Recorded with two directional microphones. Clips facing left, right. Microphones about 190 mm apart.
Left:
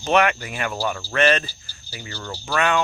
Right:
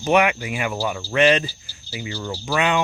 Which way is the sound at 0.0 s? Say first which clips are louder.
Right 1 dB; 10° right (ahead or behind).